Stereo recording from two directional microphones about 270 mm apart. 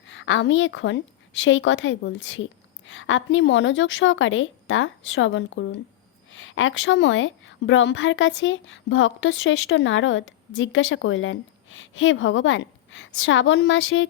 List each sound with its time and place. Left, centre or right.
0.1 s a woman's voice: left